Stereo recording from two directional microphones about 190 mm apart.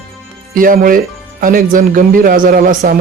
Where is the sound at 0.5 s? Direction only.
45° right (ahead or behind).